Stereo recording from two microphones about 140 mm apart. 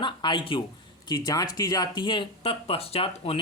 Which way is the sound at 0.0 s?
35° left (ahead or behind).